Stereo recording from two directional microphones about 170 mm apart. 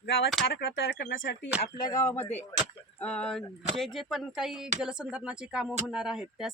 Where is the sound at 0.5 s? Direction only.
85° left.